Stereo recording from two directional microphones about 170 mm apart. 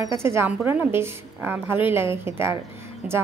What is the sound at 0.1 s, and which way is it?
A woman's voice, 15° right (ahead or behind).